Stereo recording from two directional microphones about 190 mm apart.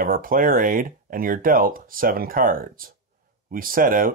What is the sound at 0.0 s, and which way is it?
Speech, 45° right (ahead or behind).